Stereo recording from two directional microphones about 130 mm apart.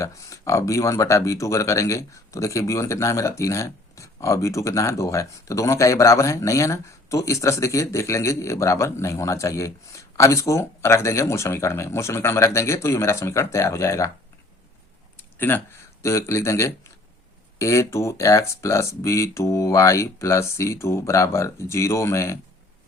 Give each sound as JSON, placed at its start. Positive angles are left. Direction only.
{"t": 0.0, "sound": "speech", "side_deg": 25}
{"t": 15.4, "sound": "speech", "side_deg": 15}